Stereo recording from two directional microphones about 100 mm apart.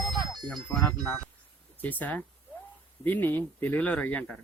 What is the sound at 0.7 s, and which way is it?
Speech, 20° left (ahead or behind).